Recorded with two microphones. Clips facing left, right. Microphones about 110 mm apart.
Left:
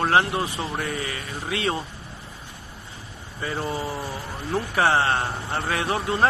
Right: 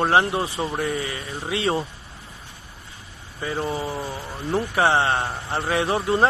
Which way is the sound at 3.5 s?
Centre (ahead or behind).